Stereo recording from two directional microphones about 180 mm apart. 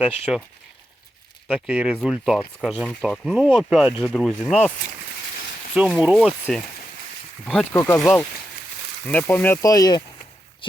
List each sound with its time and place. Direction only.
0.0 s speech: centre (ahead or behind)
1.5 s speech: 5° right (ahead or behind)
5.9 s speech: centre (ahead or behind)
7.4 s speech: 5° left (ahead or behind)
7.8 s speech: 15° left (ahead or behind)
8.0 s speech: 5° left (ahead or behind); by 10.0 s 20° left (ahead or behind)